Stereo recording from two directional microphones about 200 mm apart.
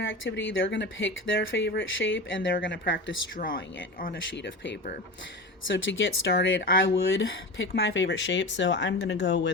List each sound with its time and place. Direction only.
0.0 s speech: 65° left (ahead or behind)
3.3 s speech: 45° left (ahead or behind)
4.0 s speech: 55° left (ahead or behind)
6.6 s speech: 55° left (ahead or behind)